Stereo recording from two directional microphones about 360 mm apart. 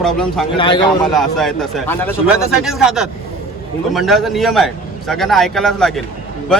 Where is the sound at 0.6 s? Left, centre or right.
Centre.